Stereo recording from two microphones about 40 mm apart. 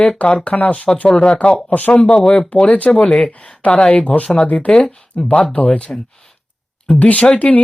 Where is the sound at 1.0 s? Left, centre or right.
Left.